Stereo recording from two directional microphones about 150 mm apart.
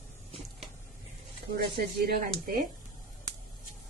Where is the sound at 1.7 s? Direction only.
85° right.